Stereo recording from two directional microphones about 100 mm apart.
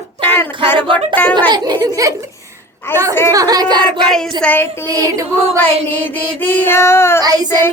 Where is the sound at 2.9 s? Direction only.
20° left (ahead or behind).